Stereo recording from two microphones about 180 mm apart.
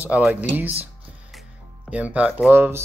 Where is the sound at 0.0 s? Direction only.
10° right (ahead or behind).